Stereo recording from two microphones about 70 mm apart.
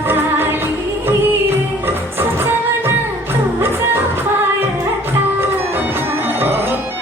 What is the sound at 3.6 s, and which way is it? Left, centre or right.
Music, right.